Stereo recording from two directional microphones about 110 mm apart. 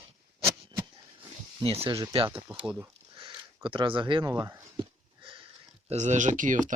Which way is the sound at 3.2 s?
45° right (ahead or behind).